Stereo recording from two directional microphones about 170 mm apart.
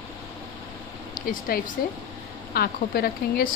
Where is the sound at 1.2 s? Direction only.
55° left (ahead or behind).